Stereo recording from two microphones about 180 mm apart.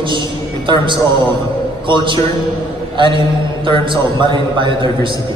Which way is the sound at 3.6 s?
30° right (ahead or behind).